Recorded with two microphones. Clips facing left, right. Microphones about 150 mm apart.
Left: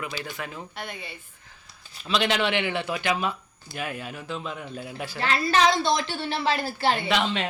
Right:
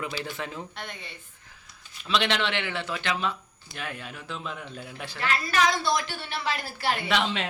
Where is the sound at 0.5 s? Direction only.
5° left (ahead or behind).